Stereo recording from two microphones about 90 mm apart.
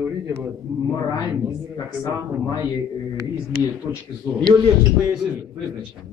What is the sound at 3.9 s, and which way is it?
Speech, 40° right (ahead or behind).